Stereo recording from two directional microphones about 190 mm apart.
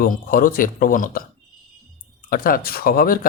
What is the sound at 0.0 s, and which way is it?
Speech, 50° left (ahead or behind).